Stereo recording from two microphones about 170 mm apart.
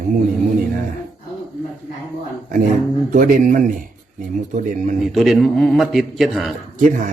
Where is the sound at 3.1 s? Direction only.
50° right (ahead or behind).